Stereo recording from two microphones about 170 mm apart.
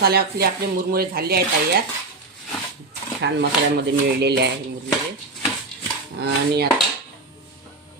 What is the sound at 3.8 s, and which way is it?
Speech, 75° right (ahead or behind).